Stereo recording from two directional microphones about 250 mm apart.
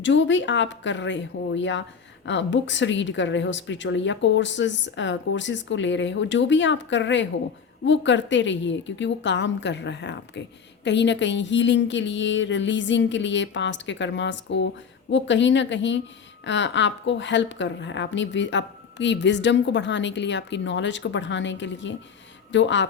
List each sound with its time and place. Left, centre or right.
0.0 s a woman's voice: left